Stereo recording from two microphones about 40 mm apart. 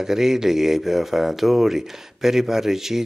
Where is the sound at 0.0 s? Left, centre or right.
Centre.